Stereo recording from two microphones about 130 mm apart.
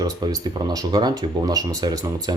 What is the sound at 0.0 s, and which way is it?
Speech, 30° right (ahead or behind).